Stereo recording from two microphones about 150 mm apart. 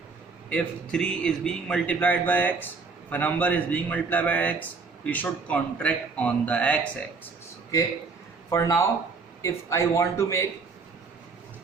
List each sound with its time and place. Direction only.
0.5 s a man's voice: 5° left (ahead or behind)
8.4 s a man's voice: 20° left (ahead or behind)